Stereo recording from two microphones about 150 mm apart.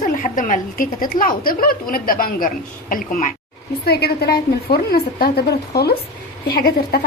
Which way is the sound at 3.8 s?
90° left.